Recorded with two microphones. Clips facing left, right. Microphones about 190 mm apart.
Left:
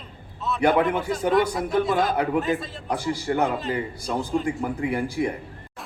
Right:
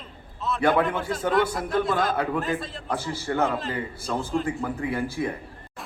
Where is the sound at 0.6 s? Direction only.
15° left (ahead or behind).